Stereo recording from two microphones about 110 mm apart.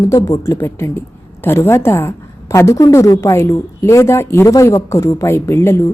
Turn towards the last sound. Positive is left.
turn(degrees=25)  # may be behind; listen again after turning